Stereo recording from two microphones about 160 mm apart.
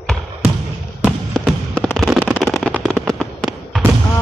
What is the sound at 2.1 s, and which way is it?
Fireworks, 10° right (ahead or behind).